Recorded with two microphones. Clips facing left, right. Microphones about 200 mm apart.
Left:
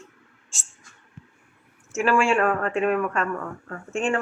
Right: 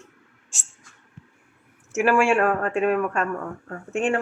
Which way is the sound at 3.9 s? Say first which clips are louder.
Right 2 dB; 60° right (ahead or behind).